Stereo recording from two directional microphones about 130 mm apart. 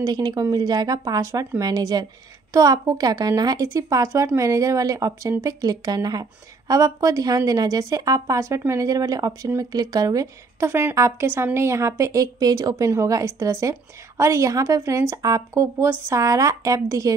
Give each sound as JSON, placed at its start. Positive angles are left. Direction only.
{"t": 0.0, "sound": "a woman's voice", "side_deg": -30}